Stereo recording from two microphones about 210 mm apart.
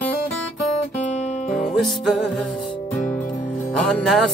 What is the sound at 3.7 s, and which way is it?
Music, 5° left (ahead or behind).